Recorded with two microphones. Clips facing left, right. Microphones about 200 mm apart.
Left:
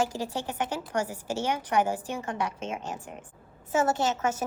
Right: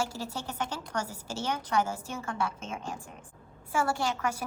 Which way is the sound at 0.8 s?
10° left (ahead or behind).